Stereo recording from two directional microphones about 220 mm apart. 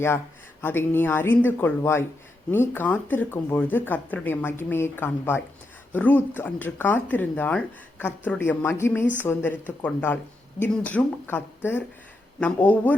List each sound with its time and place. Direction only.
0.6 s speech: 10° left (ahead or behind)